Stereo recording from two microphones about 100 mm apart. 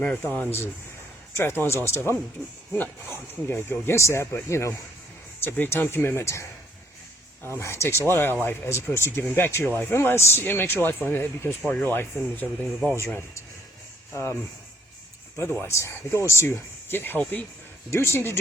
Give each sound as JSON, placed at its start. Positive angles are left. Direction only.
{"t": 0.2, "sound": "speech", "side_deg": 20}
{"t": 15.6, "sound": "speech", "side_deg": 25}